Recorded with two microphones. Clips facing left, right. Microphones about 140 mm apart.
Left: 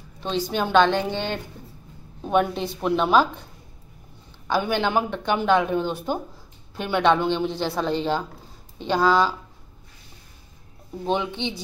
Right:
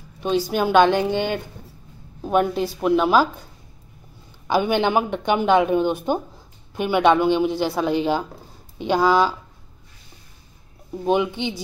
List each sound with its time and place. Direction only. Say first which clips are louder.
0.2 s a woman's voice: right 4 dB; 10° right (ahead or behind)
4.5 s speech: right 4 dB; 15° right (ahead or behind)
11.1 s speech: right 4 dB; 10° right (ahead or behind)